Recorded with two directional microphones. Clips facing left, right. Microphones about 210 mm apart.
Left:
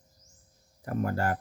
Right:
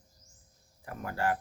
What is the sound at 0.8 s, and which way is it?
Speech, 45° left (ahead or behind).